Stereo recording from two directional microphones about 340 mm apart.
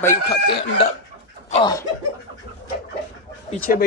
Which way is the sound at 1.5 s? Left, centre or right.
Centre.